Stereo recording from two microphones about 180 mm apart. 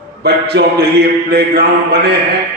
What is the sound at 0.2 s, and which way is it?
A man's voice, 65° right (ahead or behind).